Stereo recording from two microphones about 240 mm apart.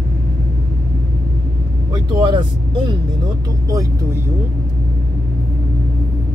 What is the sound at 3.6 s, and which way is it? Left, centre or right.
Speech, centre.